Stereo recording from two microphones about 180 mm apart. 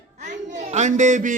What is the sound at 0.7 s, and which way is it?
Speech, 45° right (ahead or behind).